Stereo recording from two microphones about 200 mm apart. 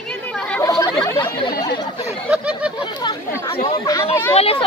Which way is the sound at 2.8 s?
20° left (ahead or behind).